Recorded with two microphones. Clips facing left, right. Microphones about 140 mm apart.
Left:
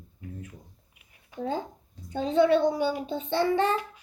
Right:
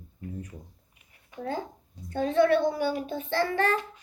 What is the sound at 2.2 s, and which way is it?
A woman's voice, 15° left (ahead or behind).